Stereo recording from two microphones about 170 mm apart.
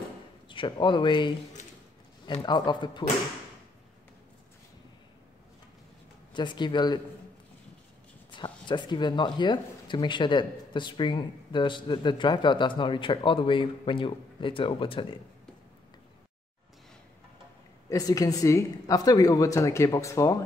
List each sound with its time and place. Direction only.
0.5 s speech: 30° left (ahead or behind)
2.4 s speech: 25° left (ahead or behind)
6.3 s speech: 25° left (ahead or behind)
8.3 s speech: 25° left (ahead or behind)
17.8 s speech: 20° left (ahead or behind)